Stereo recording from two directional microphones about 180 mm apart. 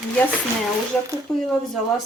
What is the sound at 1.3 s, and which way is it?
Speech, 5° left (ahead or behind).